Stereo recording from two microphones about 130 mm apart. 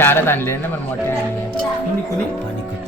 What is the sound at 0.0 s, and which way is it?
Speech, 15° left (ahead or behind).